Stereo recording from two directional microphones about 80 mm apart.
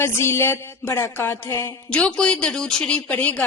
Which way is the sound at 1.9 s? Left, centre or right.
Centre.